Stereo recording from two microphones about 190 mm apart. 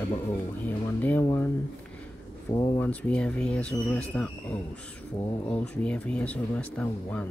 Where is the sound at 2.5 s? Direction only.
20° left (ahead or behind).